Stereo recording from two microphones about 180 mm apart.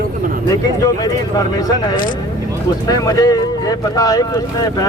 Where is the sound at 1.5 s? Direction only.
20° left (ahead or behind).